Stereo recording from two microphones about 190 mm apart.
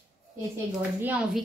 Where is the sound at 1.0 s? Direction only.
10° right (ahead or behind).